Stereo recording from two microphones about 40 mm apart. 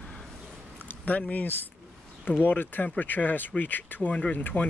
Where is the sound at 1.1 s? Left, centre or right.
Left.